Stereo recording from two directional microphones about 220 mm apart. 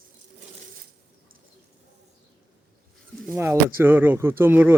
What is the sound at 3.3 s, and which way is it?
Speech, 10° right (ahead or behind).